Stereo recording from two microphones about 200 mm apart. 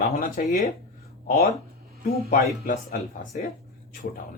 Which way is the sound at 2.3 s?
45° left (ahead or behind).